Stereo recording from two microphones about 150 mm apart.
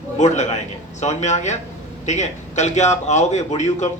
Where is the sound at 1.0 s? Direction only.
50° left (ahead or behind).